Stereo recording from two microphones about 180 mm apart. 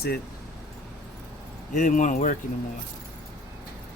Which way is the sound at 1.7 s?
45° left (ahead or behind).